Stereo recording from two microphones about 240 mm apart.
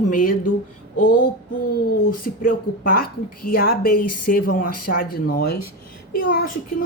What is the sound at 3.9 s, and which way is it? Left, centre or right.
Speech, left.